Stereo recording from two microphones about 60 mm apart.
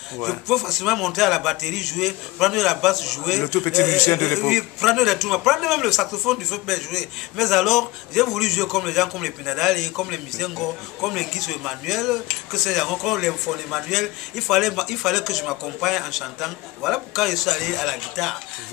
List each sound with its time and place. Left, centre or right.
0.2 s a man's voice: centre
3.4 s a man's voice: left
4.3 s a man's voice: centre